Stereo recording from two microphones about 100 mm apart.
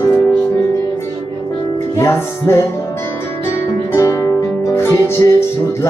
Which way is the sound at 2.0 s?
25° left (ahead or behind).